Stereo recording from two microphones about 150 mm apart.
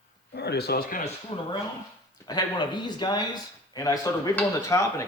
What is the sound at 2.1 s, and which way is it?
Speech, 25° left (ahead or behind).